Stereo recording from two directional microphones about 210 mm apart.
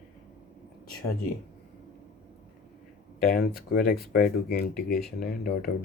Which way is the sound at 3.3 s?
45° left (ahead or behind).